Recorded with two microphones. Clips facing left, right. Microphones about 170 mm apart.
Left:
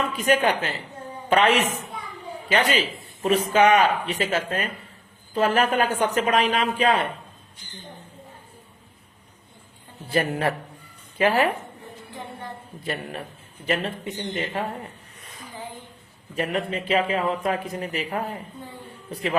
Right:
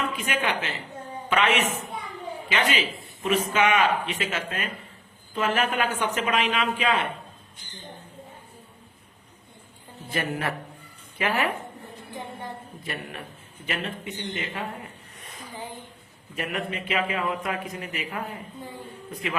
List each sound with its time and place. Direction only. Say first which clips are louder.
0.2 s speech: left 7 dB; 40° left (ahead or behind)
10.1 s speech: left 5 dB; 30° left (ahead or behind)
12.8 s speech: left 6 dB; 30° left (ahead or behind)
16.3 s speech: left 5 dB; 30° left (ahead or behind)